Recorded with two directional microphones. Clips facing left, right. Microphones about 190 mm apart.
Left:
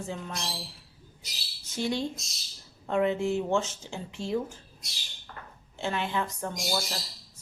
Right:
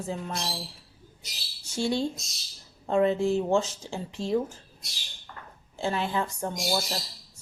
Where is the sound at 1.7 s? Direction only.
30° right (ahead or behind).